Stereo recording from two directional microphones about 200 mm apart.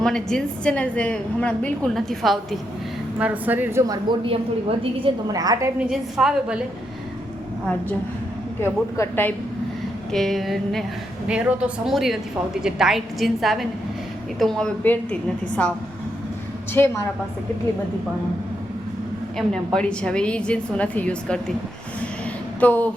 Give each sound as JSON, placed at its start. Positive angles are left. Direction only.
{"t": 0.0, "sound": "a woman's voice", "side_deg": 5}
{"t": 5.9, "sound": "a woman's voice", "side_deg": 0}
{"t": 8.6, "sound": "a woman's voice", "side_deg": 10}
{"t": 16.7, "sound": "speech", "side_deg": 10}
{"t": 19.4, "sound": "a woman's voice", "side_deg": 5}
{"t": 22.6, "sound": "speech", "side_deg": 5}